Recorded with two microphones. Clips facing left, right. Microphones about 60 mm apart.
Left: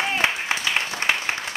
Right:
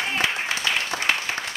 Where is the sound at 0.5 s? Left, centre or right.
Left.